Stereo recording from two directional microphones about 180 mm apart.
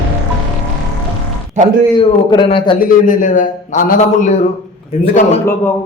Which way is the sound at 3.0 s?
45° left (ahead or behind).